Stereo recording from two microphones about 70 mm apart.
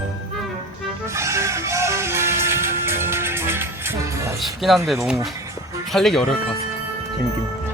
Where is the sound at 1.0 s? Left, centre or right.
Right.